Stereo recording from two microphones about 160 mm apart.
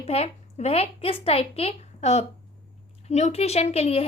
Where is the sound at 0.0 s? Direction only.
40° left (ahead or behind).